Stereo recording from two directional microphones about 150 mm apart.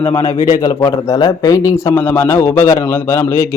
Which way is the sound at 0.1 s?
20° left (ahead or behind).